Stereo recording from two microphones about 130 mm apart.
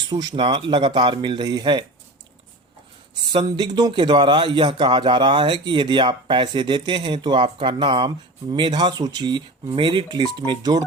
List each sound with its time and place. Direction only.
0.1 s a man's voice: 30° right (ahead or behind)
3.3 s a man's voice: 35° right (ahead or behind)